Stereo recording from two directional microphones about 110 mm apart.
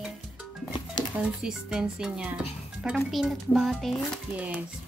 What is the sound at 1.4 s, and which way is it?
Speech, 5° right (ahead or behind).